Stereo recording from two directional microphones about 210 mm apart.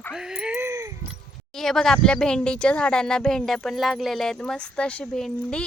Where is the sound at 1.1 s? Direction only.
Centre (ahead or behind).